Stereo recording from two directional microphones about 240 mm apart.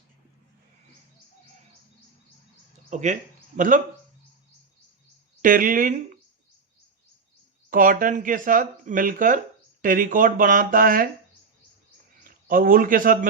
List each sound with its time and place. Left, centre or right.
2.9 s speech: right
5.4 s speech: right
7.7 s speech: right
12.2 s speech: right